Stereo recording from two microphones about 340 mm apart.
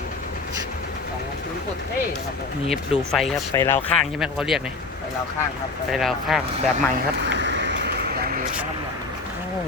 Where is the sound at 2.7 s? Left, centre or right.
Centre.